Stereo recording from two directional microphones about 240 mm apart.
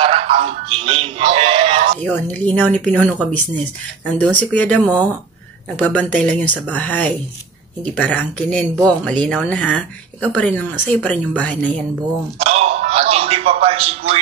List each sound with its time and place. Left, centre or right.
0.0 s music: right
2.0 s a woman's voice: centre
12.4 s a sound: right